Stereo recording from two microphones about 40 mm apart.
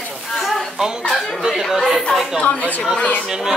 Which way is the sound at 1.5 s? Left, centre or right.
Centre.